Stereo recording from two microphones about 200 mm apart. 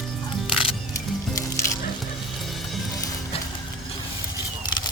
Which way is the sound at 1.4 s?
15° left (ahead or behind).